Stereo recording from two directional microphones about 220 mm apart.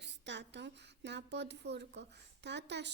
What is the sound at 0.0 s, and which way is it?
Speech, 50° right (ahead or behind).